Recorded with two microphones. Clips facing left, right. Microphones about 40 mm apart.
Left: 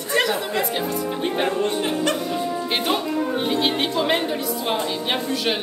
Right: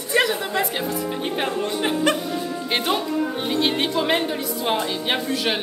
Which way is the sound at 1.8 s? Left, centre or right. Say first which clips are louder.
Right 2 dB; right.